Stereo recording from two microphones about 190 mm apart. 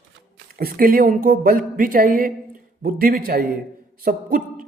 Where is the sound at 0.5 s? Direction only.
50° right (ahead or behind).